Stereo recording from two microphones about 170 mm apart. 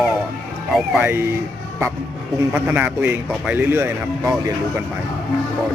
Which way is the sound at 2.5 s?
10° right (ahead or behind).